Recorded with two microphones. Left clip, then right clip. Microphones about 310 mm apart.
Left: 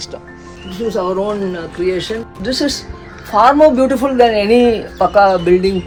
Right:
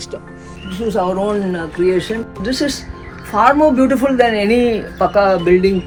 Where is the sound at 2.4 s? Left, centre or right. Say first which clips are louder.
Left 2 dB; left.